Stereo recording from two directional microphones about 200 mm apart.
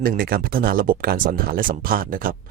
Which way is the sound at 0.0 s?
45° right (ahead or behind).